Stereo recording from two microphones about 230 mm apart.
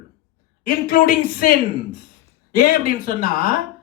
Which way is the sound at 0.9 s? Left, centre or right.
Left.